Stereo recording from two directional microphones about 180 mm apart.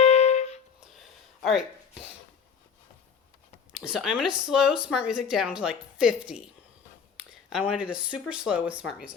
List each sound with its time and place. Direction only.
0.0 s music: 35° left (ahead or behind)
1.4 s a sound: centre (ahead or behind)
3.8 s speech: 5° right (ahead or behind)
7.7 s speech: 5° right (ahead or behind)